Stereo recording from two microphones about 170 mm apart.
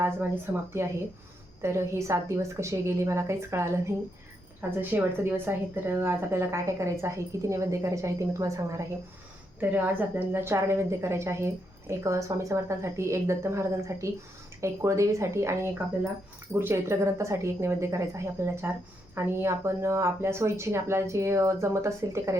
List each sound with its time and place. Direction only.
0.8 s a woman's voice: 15° right (ahead or behind)